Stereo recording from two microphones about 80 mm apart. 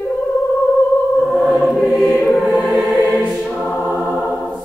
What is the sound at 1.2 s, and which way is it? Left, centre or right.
Choir, centre.